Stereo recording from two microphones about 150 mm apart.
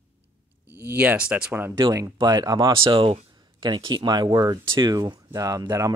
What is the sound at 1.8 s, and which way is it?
Speech, 30° right (ahead or behind).